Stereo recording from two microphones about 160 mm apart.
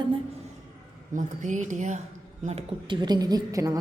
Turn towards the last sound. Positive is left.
turn(degrees=-25)  # may be behind; listen again after turning